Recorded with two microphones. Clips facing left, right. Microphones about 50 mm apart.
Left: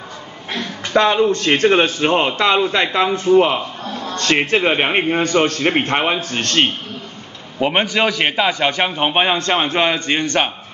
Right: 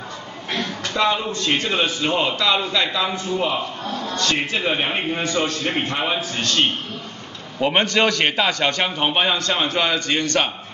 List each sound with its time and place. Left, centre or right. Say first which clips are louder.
0.9 s a man's voice: left 7 dB; left
7.5 s a man's voice: left 1 dB; centre